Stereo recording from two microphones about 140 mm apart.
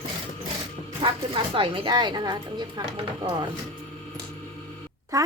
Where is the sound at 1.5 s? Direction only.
40° right (ahead or behind).